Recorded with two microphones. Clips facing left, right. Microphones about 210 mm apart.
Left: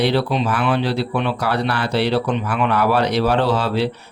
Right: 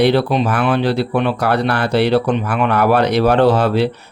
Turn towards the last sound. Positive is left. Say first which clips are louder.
# right 6 dB
turn(degrees=-55)  # may be behind; listen again after turning